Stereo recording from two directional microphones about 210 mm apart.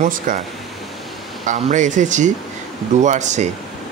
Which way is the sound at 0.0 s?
40° right (ahead or behind).